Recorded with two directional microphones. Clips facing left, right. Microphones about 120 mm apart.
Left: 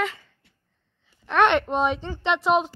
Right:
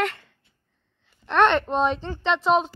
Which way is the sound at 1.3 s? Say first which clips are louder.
Even; 10° left (ahead or behind).